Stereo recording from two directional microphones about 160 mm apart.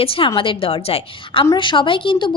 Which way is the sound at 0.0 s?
35° left (ahead or behind).